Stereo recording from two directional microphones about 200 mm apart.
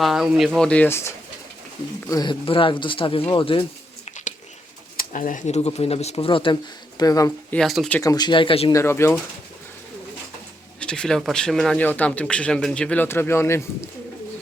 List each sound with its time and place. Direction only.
0.0 s speech: centre (ahead or behind); by 3.6 s 25° left (ahead or behind)
4.0 s a sound: 35° left (ahead or behind)
4.9 s speech: 40° left (ahead or behind); by 7.3 s 15° left (ahead or behind)
7.5 s speech: centre (ahead or behind)
8.0 s speech: 20° left (ahead or behind)
8.7 s speech: 15° left (ahead or behind)
10.8 s speech: 5° left (ahead or behind)